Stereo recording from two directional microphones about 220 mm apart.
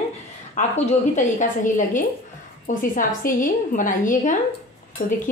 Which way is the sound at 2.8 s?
35° left (ahead or behind).